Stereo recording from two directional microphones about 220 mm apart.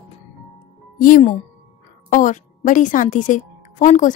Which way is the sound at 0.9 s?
40° left (ahead or behind).